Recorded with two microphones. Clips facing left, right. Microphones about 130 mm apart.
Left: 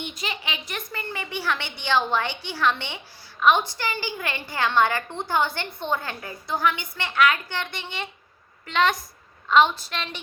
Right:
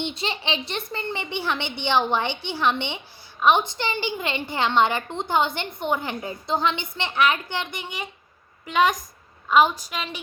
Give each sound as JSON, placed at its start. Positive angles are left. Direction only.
{"t": 0.0, "sound": "a woman's voice", "side_deg": -30}